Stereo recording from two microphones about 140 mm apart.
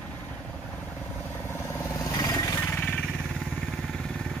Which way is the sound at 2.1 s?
30° left (ahead or behind).